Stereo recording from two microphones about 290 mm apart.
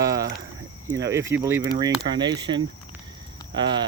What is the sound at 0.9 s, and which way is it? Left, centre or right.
Speech, centre.